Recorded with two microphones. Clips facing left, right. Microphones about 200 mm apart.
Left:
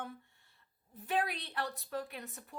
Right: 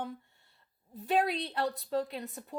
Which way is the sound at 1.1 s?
30° right (ahead or behind).